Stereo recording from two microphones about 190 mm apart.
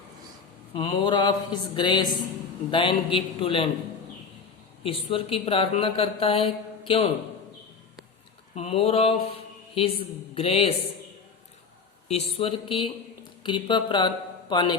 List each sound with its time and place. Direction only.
0.7 s speech: 25° left (ahead or behind)
4.8 s speech: 30° left (ahead or behind)
8.5 s a sound: 30° left (ahead or behind)
9.7 s speech: 30° left (ahead or behind)
12.0 s speech: 30° left (ahead or behind)